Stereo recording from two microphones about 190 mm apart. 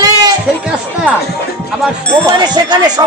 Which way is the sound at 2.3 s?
20° right (ahead or behind).